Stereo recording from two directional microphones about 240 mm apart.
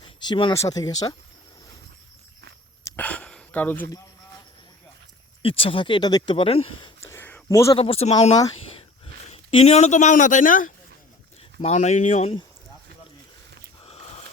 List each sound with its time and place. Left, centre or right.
0.2 s speech: centre
2.8 s throat clearing: centre
5.4 s speech: left
7.1 s a sound: centre
7.8 s speech: left
13.8 s a sound: left